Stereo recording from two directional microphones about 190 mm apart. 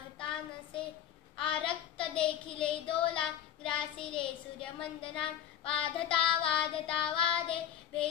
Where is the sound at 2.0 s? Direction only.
25° left (ahead or behind).